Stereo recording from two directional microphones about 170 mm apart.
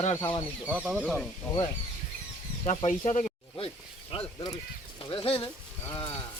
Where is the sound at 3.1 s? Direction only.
40° left (ahead or behind).